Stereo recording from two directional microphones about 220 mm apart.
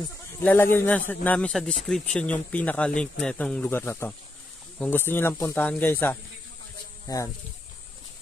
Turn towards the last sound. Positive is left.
turn(degrees=15)  # may be behind; listen again after turning